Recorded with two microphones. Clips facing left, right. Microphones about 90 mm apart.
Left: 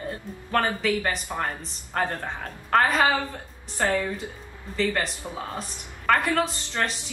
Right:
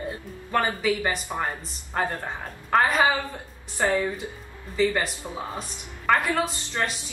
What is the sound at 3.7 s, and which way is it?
Speech, 20° right (ahead or behind).